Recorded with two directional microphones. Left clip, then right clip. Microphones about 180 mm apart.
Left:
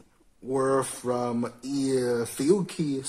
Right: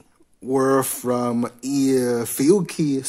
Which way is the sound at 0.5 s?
55° right (ahead or behind).